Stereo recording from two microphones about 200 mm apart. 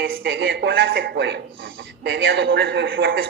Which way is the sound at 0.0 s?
65° right (ahead or behind).